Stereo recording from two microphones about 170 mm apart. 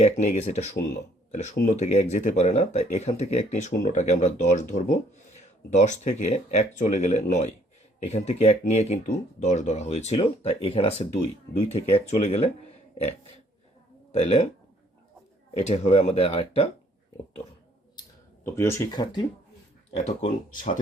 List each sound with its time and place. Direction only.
0.0 s speech: 40° left (ahead or behind)
14.1 s speech: 40° left (ahead or behind)
15.5 s speech: 40° left (ahead or behind)
18.4 s speech: 15° left (ahead or behind)
20.0 s speech: 45° left (ahead or behind)